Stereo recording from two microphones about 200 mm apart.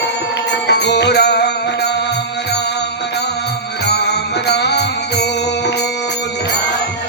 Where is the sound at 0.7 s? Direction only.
60° left (ahead or behind).